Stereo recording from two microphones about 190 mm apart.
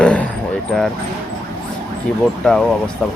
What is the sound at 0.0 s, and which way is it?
Vehicle, 5° left (ahead or behind).